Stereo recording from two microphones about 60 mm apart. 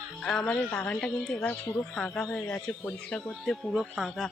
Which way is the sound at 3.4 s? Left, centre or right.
Centre.